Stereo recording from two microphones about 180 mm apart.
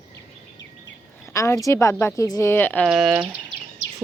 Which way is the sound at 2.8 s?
5° right (ahead or behind).